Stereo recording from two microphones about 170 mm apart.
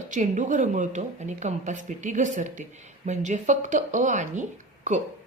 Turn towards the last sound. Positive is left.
turn(degrees=-45)  # may be behind; listen again after turning